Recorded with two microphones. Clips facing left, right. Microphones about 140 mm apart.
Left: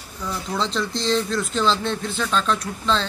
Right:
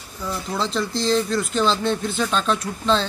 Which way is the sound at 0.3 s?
5° right (ahead or behind).